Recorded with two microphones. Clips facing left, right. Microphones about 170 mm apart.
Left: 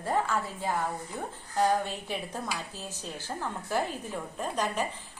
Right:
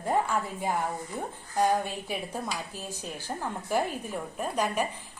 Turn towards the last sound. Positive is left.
turn(degrees=-10)  # may be behind; listen again after turning